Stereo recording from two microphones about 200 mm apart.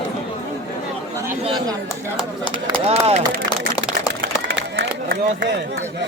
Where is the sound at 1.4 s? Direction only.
20° right (ahead or behind).